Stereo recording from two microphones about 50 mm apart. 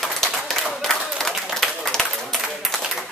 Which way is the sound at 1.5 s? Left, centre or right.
Centre.